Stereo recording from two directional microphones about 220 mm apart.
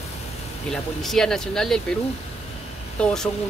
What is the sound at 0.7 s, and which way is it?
Speech, centre (ahead or behind).